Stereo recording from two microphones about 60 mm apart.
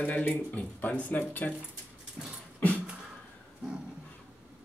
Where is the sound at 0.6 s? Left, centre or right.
Left.